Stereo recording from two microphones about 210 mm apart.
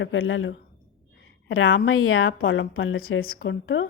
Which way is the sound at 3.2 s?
45° left (ahead or behind).